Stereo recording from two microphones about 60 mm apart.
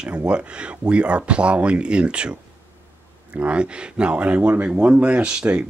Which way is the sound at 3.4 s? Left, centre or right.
Centre.